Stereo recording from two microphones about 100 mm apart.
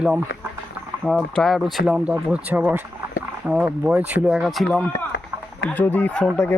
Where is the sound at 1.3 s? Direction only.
5° left (ahead or behind).